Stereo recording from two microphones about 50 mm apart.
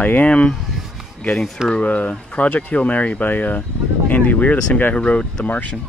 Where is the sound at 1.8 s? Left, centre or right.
Left.